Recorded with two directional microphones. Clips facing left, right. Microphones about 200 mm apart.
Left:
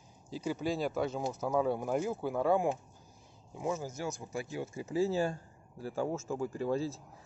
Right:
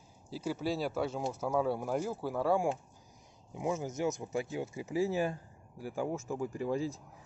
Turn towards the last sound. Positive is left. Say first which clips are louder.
# left 1 dB
turn(degrees=-15)  # may be behind; listen again after turning